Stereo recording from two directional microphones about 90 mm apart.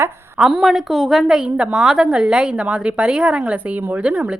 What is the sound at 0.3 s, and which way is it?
A woman's voice, 10° right (ahead or behind).